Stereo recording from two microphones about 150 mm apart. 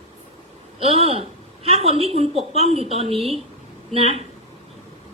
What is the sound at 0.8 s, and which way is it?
A woman's voice, 40° right (ahead or behind).